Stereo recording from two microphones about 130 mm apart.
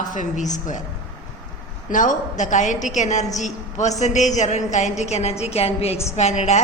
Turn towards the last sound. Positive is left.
turn(degrees=65)  # may be behind; listen again after turning